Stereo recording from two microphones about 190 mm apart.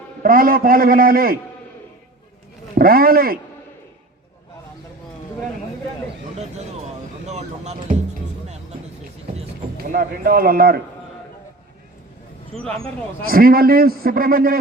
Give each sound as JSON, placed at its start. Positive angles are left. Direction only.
{"t": 0.2, "sound": "a man's voice", "side_deg": -50}
{"t": 2.7, "sound": "a man's voice", "side_deg": -50}
{"t": 7.3, "sound": "speech", "side_deg": -35}
{"t": 9.7, "sound": "a man's voice", "side_deg": -50}
{"t": 13.2, "sound": "a man's voice", "side_deg": -50}